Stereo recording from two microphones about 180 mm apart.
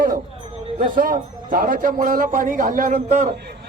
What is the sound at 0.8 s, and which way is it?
A man's voice, 50° right (ahead or behind).